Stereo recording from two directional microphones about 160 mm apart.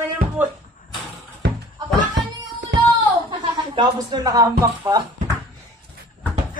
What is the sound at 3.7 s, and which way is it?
Speech, 25° right (ahead or behind).